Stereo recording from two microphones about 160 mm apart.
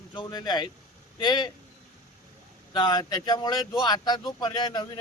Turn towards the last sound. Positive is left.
turn(degrees=25)  # may be behind; listen again after turning